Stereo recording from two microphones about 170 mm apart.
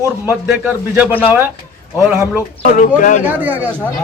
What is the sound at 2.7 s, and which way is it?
Speech, 50° left (ahead or behind).